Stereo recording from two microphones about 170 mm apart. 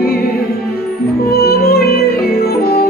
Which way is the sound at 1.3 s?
65° left (ahead or behind).